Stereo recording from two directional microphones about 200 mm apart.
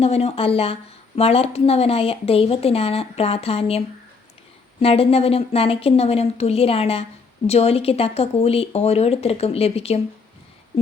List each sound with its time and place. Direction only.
0.0 s a woman's voice: 30° left (ahead or behind)